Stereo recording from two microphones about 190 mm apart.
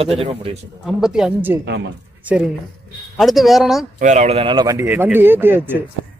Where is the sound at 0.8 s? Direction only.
5° right (ahead or behind).